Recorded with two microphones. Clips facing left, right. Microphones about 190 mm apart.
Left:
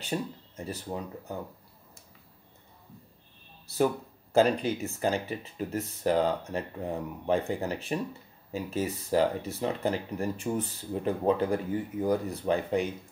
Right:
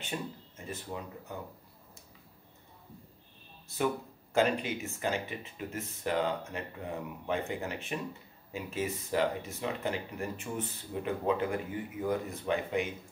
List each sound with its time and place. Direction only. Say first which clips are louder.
0.1 s speech: left 6 dB; 35° left (ahead or behind)
3.7 s speech: left 5 dB; 35° left (ahead or behind)